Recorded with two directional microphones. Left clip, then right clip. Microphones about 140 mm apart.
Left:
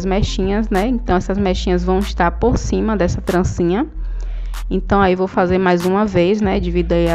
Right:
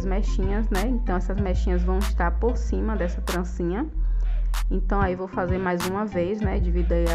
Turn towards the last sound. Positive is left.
turn(degrees=25)  # may be behind; listen again after turning